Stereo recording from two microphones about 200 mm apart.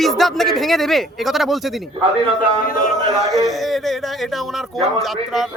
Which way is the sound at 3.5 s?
Centre (ahead or behind).